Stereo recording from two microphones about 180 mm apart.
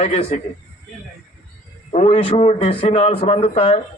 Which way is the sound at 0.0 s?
35° left (ahead or behind).